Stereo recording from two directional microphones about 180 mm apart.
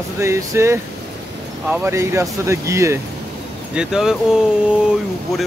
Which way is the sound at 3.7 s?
5° right (ahead or behind).